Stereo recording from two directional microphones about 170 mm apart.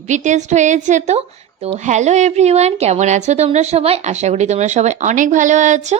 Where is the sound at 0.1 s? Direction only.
45° right (ahead or behind).